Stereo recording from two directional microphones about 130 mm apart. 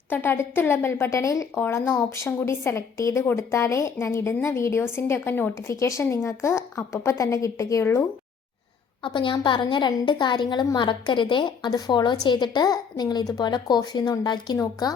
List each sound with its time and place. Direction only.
0.1 s a woman's voice: 15° left (ahead or behind)
9.0 s a woman's voice: 40° left (ahead or behind)